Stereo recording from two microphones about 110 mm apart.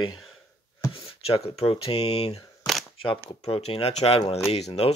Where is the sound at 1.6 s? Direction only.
60° left (ahead or behind).